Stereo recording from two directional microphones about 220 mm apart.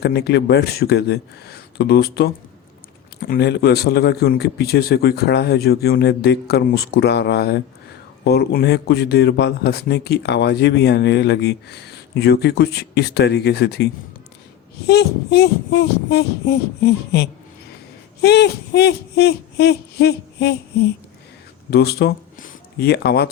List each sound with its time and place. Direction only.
0.0 s a man's voice: 50° left (ahead or behind)
14.8 s a man's voice: 50° left (ahead or behind)
21.7 s speech: 45° left (ahead or behind)